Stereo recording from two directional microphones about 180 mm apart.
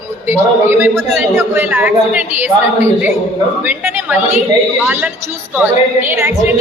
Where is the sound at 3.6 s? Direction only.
10° right (ahead or behind).